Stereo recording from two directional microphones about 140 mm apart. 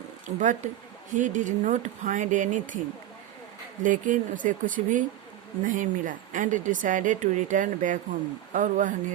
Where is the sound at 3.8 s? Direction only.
70° right (ahead or behind).